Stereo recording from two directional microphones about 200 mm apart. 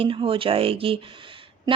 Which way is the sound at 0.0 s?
25° right (ahead or behind).